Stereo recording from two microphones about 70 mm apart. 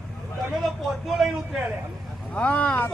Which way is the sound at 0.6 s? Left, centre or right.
Centre.